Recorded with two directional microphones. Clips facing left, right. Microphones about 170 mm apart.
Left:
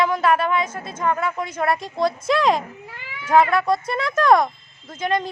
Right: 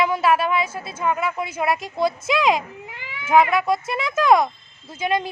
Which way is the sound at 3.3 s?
5° right (ahead or behind).